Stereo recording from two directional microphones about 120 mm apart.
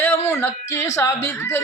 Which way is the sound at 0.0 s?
20° left (ahead or behind).